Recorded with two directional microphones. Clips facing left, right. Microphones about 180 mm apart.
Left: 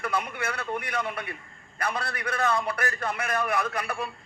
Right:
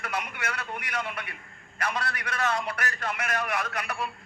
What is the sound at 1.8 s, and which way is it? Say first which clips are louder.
A man's voice: left 1 dB; 30° left (ahead or behind).